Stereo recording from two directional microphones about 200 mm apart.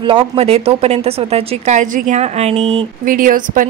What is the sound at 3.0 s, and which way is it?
Speech, 45° right (ahead or behind).